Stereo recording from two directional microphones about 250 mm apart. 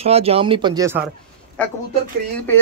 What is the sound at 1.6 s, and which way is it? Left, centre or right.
Speech, centre.